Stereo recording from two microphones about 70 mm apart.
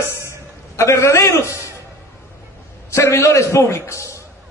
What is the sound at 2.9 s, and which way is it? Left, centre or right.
A man's voice, left.